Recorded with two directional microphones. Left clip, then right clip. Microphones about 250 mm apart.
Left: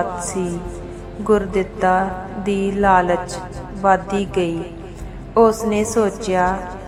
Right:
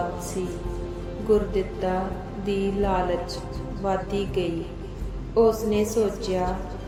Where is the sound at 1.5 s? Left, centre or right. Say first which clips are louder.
Left 9 dB; centre.